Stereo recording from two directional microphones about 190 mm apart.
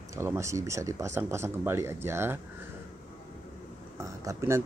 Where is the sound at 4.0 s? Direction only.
15° right (ahead or behind).